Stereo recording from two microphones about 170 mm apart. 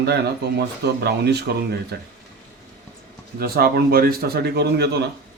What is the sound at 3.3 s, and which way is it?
A man's voice, 65° right (ahead or behind).